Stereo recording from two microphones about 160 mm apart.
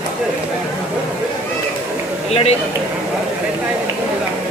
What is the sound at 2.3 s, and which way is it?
Speech, 40° left (ahead or behind).